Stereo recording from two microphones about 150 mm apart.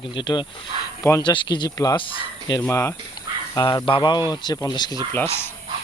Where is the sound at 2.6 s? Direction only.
20° left (ahead or behind).